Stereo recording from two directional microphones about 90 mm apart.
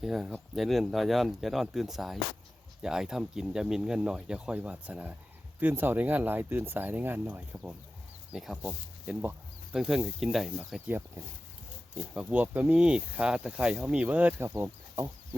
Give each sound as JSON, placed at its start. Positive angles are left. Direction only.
{"t": 0.0, "sound": "speech", "side_deg": 0}
{"t": 8.3, "sound": "speech", "side_deg": -5}
{"t": 12.3, "sound": "speech", "side_deg": -20}